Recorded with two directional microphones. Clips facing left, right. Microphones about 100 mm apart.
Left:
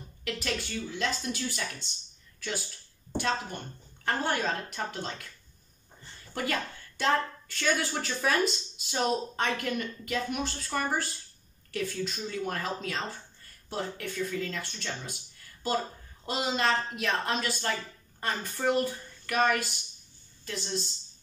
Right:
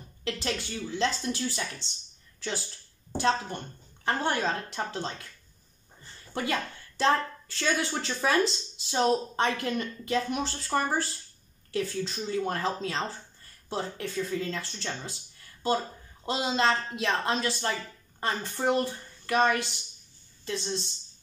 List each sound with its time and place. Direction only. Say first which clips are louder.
0.2 s a woman's voice: right 1 dB; 25° right (ahead or behind)
4.0 s a woman's voice: right 2 dB; 25° right (ahead or behind)
6.3 s a woman's voice: right 2 dB; 25° right (ahead or behind)
16.3 s a woman's voice: right 2 dB; 25° right (ahead or behind)